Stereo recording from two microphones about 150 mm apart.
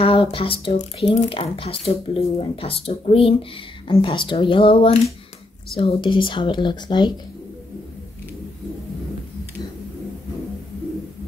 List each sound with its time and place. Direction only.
0.0 s speech: 35° left (ahead or behind)